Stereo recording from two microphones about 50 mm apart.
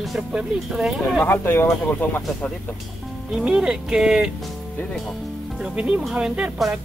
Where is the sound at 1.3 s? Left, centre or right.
Left.